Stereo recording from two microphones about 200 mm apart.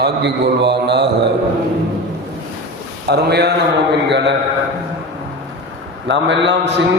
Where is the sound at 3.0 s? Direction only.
55° right (ahead or behind).